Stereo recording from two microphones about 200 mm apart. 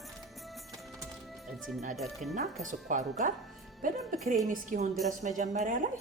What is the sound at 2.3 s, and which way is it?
A woman's voice, 40° right (ahead or behind).